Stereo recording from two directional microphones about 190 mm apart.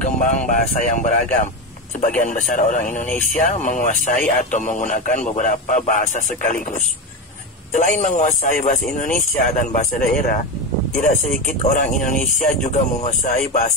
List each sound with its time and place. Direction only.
0.0 s speech: 40° left (ahead or behind)
7.7 s speech: 40° left (ahead or behind)